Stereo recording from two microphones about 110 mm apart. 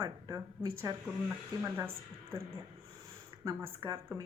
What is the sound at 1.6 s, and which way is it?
Speech, 20° right (ahead or behind).